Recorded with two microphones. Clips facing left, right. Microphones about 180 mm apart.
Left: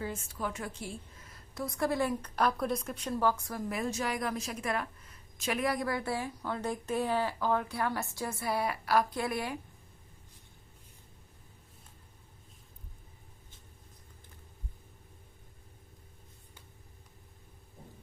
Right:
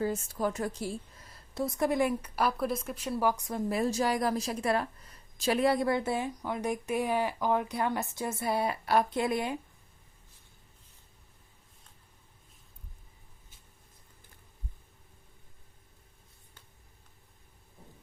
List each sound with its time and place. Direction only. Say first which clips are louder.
0.0 s a woman's voice: right 6 dB; 40° right (ahead or behind)
1.5 s a woman's voice: right 3 dB; 25° right (ahead or behind)